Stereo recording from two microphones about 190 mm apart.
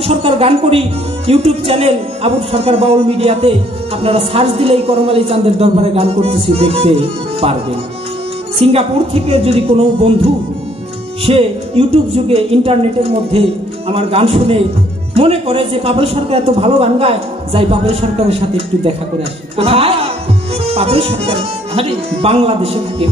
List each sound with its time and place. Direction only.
0.0 s a man's voice: 30° right (ahead or behind)
8.5 s a man's voice: 30° right (ahead or behind)
19.5 s a man's voice: 30° right (ahead or behind)